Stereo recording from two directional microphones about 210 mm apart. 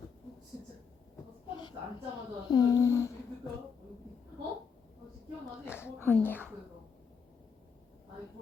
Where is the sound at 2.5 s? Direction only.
15° left (ahead or behind).